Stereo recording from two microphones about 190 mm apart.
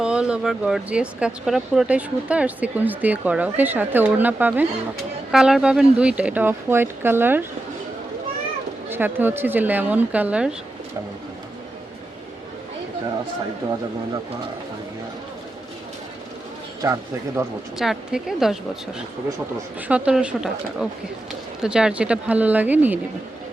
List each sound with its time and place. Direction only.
0.0 s speech: 5° right (ahead or behind)
8.9 s speech: 10° right (ahead or behind)
16.8 s speech: 15° right (ahead or behind)
17.7 s speech: centre (ahead or behind)
19.9 s speech: 5° right (ahead or behind)
21.6 s speech: 5° right (ahead or behind)